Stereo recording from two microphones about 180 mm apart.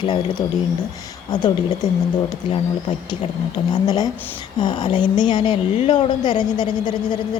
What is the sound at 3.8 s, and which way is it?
A woman's voice, 25° left (ahead or behind).